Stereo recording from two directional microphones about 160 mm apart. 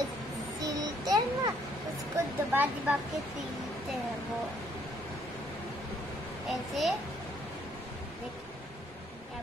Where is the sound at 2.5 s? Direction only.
10° right (ahead or behind).